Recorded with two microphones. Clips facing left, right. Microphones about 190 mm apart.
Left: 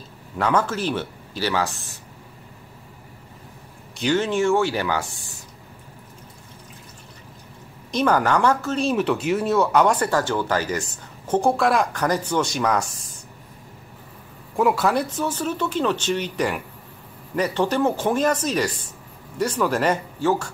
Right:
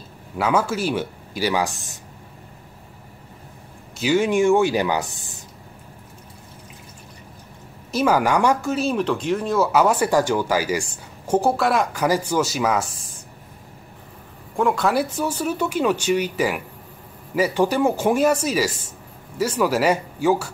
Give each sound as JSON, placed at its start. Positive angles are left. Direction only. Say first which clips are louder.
{"t": 0.4, "sound": "speech", "louder": "right 1 dB", "side_deg": -10}
{"t": 4.0, "sound": "speech", "louder": "right 3 dB", "side_deg": -10}
{"t": 7.9, "sound": "speech", "louder": "right 1 dB", "side_deg": -10}
{"t": 8.8, "sound": "speech", "louder": "left 2 dB", "side_deg": 5}
{"t": 14.6, "sound": "speech", "louder": "even", "side_deg": 5}
{"t": 15.0, "sound": "speech", "louder": "right 1 dB", "side_deg": -10}